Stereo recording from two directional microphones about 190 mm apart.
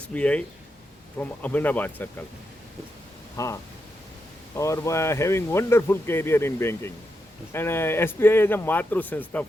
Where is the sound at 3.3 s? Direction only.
15° left (ahead or behind).